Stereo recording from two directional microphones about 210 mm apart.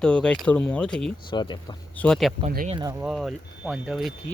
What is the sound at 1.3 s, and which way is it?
Speech, 20° left (ahead or behind).